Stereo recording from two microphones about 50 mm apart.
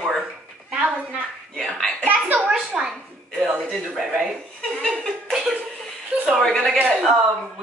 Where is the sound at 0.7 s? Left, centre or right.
Right.